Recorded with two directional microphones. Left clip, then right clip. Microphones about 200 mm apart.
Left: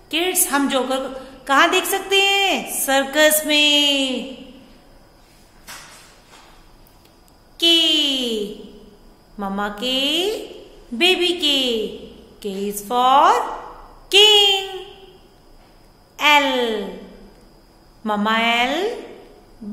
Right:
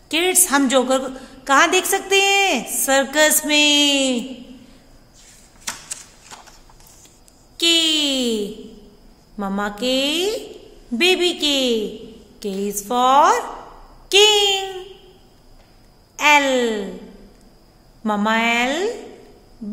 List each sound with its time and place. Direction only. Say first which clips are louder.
0.1 s a woman's voice: right 2 dB; 35° right (ahead or behind)
7.5 s a sound: left 1 dB; 30° right (ahead or behind)
9.4 s a woman's voice: right 1 dB; 30° right (ahead or behind)
16.2 s a woman's voice: right 1 dB; 25° right (ahead or behind)
18.0 s a woman's voice: even; 25° right (ahead or behind)